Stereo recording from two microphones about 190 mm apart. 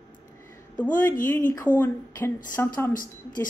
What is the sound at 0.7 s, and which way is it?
Speech, 10° left (ahead or behind).